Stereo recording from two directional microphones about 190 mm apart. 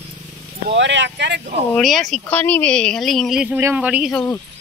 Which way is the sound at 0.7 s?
70° right (ahead or behind).